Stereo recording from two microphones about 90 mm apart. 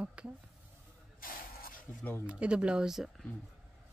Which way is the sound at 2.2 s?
15° right (ahead or behind).